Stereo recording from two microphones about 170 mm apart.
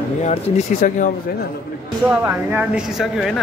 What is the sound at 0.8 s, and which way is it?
Speech, 50° left (ahead or behind).